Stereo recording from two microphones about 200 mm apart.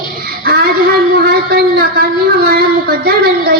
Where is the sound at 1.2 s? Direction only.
50° right (ahead or behind).